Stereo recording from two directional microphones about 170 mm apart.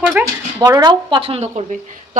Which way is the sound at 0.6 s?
25° right (ahead or behind).